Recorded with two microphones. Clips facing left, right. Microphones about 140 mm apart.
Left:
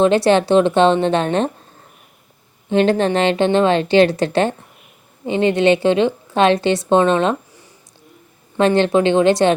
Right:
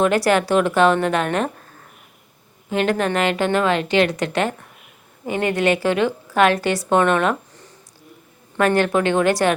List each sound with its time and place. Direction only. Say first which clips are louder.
0.0 s a woman's voice: left 4 dB; 25° left (ahead or behind)
2.6 s a woman's voice: left 5 dB; 30° left (ahead or behind)
8.5 s a woman's voice: left 3 dB; 25° left (ahead or behind)